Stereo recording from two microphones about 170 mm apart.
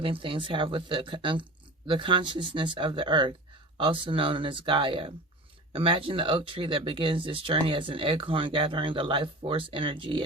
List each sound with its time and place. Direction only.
0.0 s speech: 30° right (ahead or behind)